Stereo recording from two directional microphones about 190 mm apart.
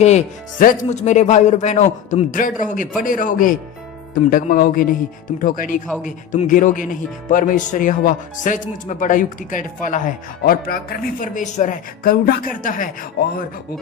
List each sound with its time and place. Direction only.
0.6 s a man's voice: 45° left (ahead or behind)